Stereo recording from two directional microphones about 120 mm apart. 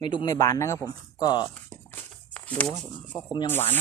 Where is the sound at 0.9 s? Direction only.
35° left (ahead or behind).